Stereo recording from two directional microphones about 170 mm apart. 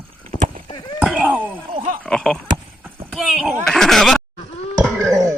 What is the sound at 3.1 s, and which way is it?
Speech, centre (ahead or behind).